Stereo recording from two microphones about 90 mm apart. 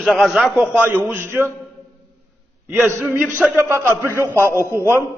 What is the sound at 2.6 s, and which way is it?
A man's voice, 25° right (ahead or behind).